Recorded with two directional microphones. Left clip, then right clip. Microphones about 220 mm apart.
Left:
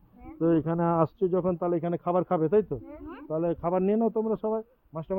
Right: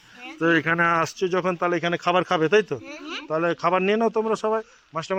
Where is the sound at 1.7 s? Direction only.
Centre (ahead or behind).